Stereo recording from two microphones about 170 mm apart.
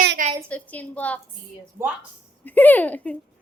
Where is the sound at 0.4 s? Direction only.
10° left (ahead or behind).